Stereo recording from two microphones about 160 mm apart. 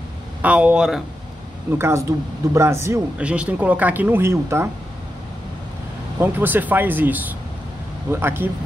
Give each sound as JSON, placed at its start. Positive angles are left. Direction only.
{"t": 0.4, "sound": "speech", "side_deg": -10}
{"t": 1.8, "sound": "speech", "side_deg": -15}
{"t": 6.1, "sound": "speech", "side_deg": -15}